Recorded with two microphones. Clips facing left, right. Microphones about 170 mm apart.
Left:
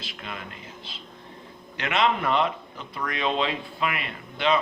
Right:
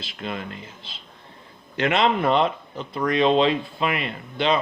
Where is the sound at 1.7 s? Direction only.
30° right (ahead or behind).